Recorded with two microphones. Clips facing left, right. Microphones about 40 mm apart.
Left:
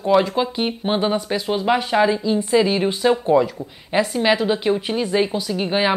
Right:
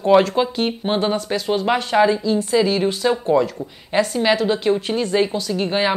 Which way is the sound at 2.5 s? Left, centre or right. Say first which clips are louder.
Left 1 dB; centre.